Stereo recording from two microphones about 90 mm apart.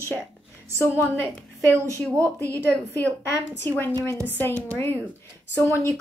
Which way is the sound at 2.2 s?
30° right (ahead or behind).